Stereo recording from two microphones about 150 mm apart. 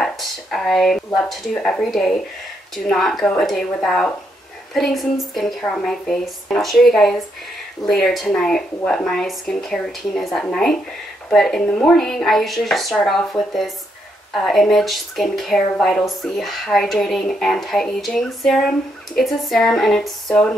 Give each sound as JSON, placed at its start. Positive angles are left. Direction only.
{"t": 0.0, "sound": "speech", "side_deg": 5}